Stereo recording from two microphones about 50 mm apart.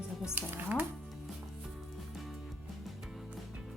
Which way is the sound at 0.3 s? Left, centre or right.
Right.